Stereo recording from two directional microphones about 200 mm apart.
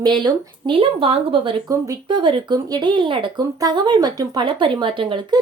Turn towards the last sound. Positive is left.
turn(degrees=-25)  # may be behind; listen again after turning